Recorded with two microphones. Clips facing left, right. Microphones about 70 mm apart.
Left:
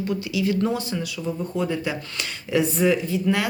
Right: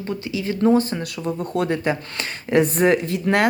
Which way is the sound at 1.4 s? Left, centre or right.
Right.